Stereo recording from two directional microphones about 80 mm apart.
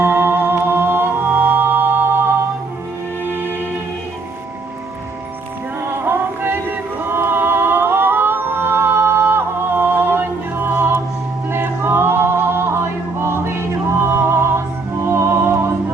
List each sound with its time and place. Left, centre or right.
0.0 s music: right
3.2 s music: right
6.1 s a sound: right
11.4 s music: right